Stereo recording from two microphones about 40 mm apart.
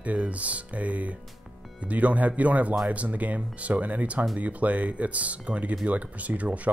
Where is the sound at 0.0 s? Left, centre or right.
Right.